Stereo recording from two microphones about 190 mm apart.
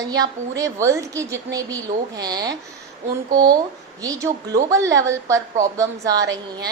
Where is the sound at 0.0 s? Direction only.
20° right (ahead or behind).